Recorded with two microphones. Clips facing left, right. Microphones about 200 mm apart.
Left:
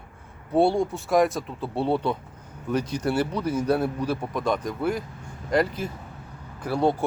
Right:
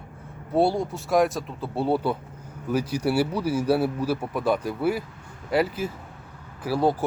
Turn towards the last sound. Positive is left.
turn(degrees=-5)  # may be behind; listen again after turning